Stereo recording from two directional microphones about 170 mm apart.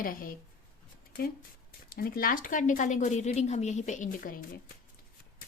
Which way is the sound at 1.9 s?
60° left (ahead or behind).